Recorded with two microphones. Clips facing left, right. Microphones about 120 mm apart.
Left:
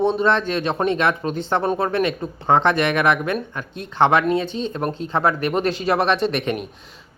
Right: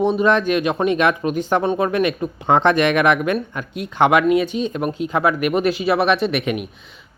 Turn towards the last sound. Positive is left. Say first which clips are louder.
# right 1 dB
turn(degrees=-5)  # may be behind; listen again after turning